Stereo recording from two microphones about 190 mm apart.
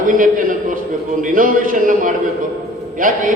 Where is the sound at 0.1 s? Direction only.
45° right (ahead or behind).